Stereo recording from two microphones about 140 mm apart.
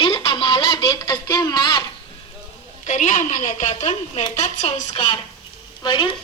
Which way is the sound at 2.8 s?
60° left (ahead or behind).